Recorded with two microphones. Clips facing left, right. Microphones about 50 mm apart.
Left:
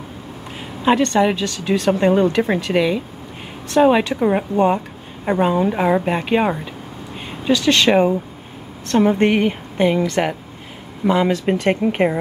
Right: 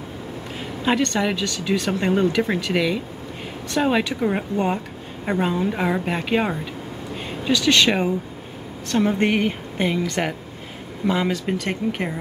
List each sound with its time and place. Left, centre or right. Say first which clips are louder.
0.8 s a woman's voice: left 6 dB; centre
9.1 s a woman's voice: left 4 dB; centre
11.4 s speech: left 7 dB; left